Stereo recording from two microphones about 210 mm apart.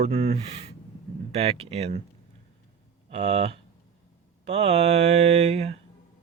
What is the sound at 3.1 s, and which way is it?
Speech, 30° right (ahead or behind).